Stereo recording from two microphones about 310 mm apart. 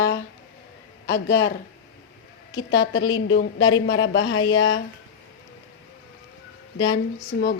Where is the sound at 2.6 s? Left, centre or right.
Left.